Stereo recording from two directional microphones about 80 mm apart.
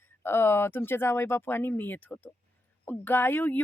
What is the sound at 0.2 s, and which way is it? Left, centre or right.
Speech, left.